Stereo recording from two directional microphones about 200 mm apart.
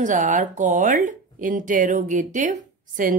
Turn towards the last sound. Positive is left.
turn(degrees=-40)  # may be behind; listen again after turning